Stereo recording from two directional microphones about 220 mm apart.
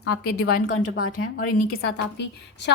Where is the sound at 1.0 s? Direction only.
80° left.